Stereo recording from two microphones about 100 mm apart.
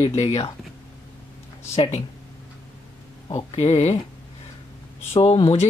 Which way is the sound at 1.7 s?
90° left.